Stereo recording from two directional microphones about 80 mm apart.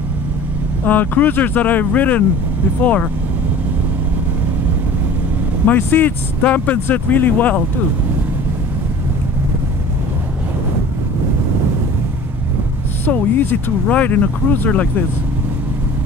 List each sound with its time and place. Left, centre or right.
0.8 s speech: left
5.7 s speech: left
13.0 s speech: left